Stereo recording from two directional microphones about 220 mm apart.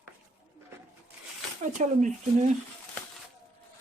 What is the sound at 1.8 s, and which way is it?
Speech, 35° right (ahead or behind).